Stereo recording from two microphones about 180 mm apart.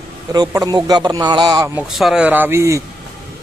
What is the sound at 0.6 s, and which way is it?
Speech, 20° right (ahead or behind).